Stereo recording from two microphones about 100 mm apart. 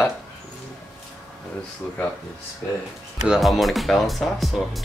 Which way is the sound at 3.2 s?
5° right (ahead or behind).